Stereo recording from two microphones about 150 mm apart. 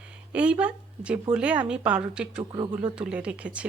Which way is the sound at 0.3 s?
10° right (ahead or behind).